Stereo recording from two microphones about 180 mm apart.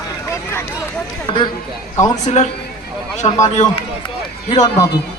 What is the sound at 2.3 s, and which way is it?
Speech, 35° left (ahead or behind).